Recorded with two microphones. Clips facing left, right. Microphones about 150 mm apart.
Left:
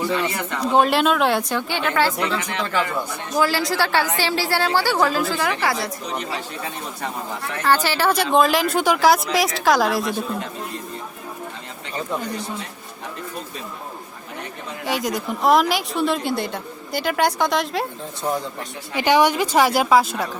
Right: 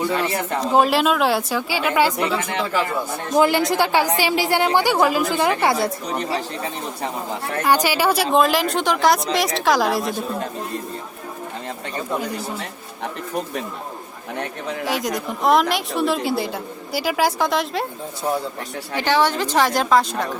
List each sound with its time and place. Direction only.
0.7 s a woman's voice: centre (ahead or behind)
3.3 s a woman's voice: 20° right (ahead or behind)
7.6 s a woman's voice: 15° right (ahead or behind)
14.8 s a woman's voice: centre (ahead or behind)
18.9 s a woman's voice: 15° left (ahead or behind)